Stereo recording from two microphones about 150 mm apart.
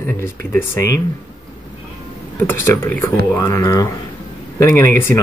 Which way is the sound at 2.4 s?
15° left (ahead or behind).